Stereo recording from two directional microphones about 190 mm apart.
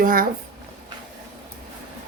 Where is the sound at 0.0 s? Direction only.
50° right (ahead or behind).